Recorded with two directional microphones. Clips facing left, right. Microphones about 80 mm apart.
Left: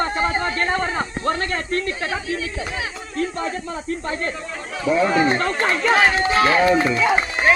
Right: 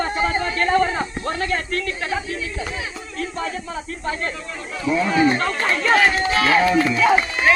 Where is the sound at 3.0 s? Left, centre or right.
Left.